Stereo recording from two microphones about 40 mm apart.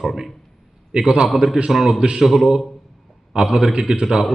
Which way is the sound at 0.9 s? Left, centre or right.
Centre.